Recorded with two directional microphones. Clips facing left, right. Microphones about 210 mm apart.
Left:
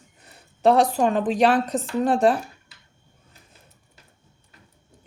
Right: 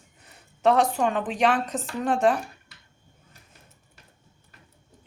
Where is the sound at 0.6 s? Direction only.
35° left (ahead or behind).